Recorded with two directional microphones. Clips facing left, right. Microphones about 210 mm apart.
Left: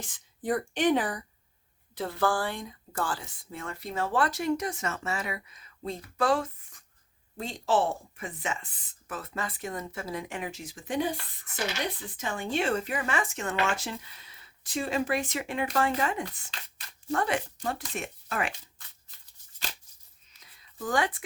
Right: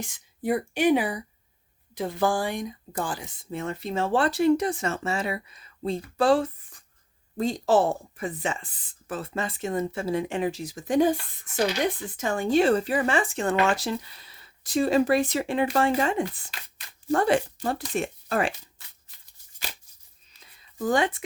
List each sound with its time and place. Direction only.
0.0 s speech: 10° right (ahead or behind); by 11.1 s 45° right (ahead or behind)
12.1 s speech: 45° right (ahead or behind)
20.3 s a sound: 30° right (ahead or behind)